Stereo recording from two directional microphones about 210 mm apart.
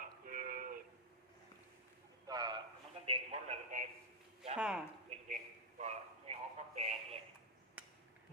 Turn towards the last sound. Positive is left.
turn(degrees=-30)  # may be behind; listen again after turning